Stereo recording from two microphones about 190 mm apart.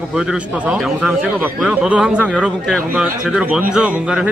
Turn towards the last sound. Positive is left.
turn(degrees=-5)  # may be behind; listen again after turning